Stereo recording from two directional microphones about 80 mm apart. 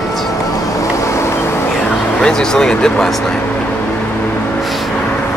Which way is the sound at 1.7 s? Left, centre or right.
Centre.